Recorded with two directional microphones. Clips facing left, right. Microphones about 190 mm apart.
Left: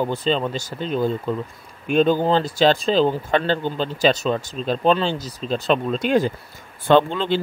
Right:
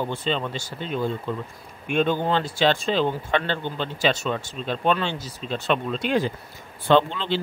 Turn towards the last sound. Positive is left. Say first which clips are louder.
# left 3 dB
turn(degrees=45)  # may be behind; listen again after turning